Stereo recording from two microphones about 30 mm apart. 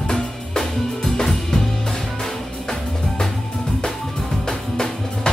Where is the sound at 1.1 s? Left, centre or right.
Centre.